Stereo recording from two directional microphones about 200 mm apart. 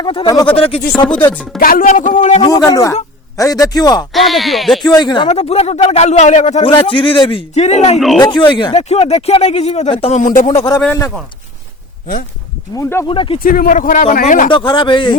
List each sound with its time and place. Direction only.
0.0 s a man's voice: 25° left (ahead or behind)
1.0 s speech: 5° left (ahead or behind)
1.5 s speech: 45° left (ahead or behind)
2.5 s speech: 15° left (ahead or behind)
4.1 s speech: centre (ahead or behind)
4.9 s speech: 20° left (ahead or behind)
6.7 s a man's voice: 25° left (ahead or behind)
7.9 s speech: centre (ahead or behind)
8.2 s speech: 20° left (ahead or behind); by 10.6 s 40° left (ahead or behind)
10.7 s speech: 10° left (ahead or behind)
12.7 s speech: 15° left (ahead or behind)
13.1 s a man's voice: 25° left (ahead or behind)
13.4 s speech: 45° left (ahead or behind)
14.5 s a man's voice: 25° left (ahead or behind)